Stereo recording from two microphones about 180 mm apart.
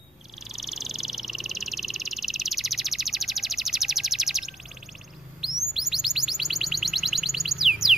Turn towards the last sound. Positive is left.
turn(degrees=0)  # may be behind; listen again after turning